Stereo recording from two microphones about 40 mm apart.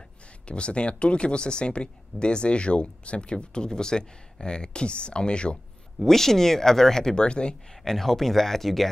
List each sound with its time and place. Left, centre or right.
0.5 s speech: left
6.0 s speech: centre
7.2 s speech: left
7.8 s speech: centre